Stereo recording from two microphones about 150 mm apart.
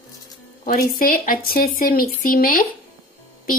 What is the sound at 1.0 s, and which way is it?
A child's voice, 70° left (ahead or behind).